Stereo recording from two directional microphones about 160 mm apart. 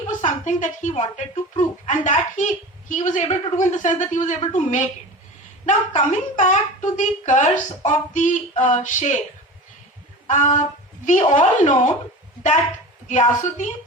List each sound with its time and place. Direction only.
0.2 s a woman's voice: 50° left (ahead or behind)
10.2 s a woman's voice: 50° left (ahead or behind)
13.1 s a woman's voice: 50° left (ahead or behind)